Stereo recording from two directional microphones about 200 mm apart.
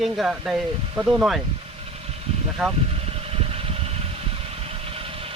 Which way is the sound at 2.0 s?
30° right (ahead or behind).